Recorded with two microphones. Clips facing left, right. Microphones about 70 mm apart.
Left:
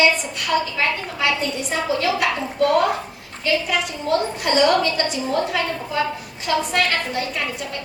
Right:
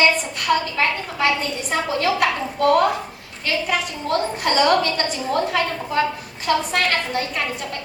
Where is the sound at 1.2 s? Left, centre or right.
Right.